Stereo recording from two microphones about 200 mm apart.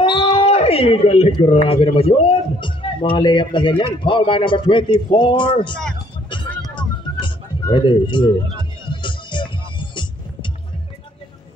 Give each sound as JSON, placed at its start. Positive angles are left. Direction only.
{"t": 0.0, "sound": "a man's voice", "side_deg": 20}
{"t": 5.7, "sound": "speech", "side_deg": 5}
{"t": 6.7, "sound": "music", "side_deg": 25}